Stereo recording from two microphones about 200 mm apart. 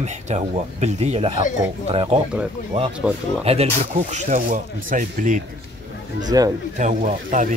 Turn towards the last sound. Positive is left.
turn(degrees=-40)  # may be behind; listen again after turning